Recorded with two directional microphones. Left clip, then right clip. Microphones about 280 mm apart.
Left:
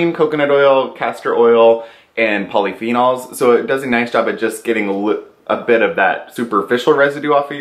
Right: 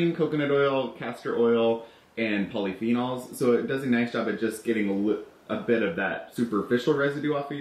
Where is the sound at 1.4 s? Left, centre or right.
Left.